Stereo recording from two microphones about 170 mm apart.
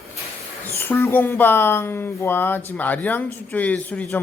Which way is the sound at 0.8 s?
10° left (ahead or behind).